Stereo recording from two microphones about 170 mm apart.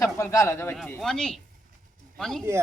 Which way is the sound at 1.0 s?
5° left (ahead or behind).